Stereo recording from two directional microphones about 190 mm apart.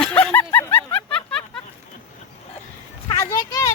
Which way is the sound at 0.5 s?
10° left (ahead or behind).